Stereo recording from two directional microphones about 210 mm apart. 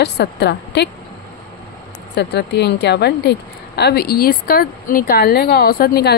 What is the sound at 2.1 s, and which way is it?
A woman's voice, 50° left (ahead or behind).